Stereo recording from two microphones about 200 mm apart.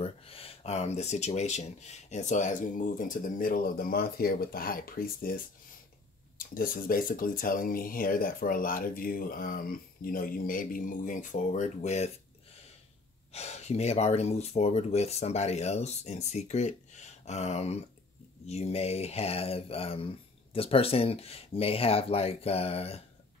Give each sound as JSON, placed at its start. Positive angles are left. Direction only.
{"t": 0.0, "sound": "speech", "side_deg": 30}
{"t": 13.3, "sound": "speech", "side_deg": 35}